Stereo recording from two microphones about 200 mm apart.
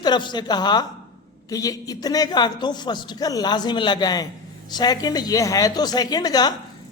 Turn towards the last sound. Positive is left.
turn(degrees=20)  # may be behind; listen again after turning